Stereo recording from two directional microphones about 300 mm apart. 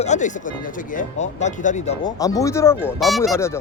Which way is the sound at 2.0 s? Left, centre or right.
Centre.